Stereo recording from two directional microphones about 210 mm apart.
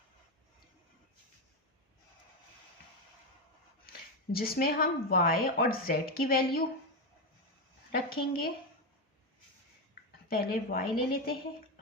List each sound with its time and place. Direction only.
4.3 s a woman's voice: 45° left (ahead or behind)
7.9 s a woman's voice: 45° left (ahead or behind)
10.2 s a woman's voice: 45° left (ahead or behind)